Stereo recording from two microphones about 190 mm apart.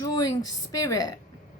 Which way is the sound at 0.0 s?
20° left (ahead or behind).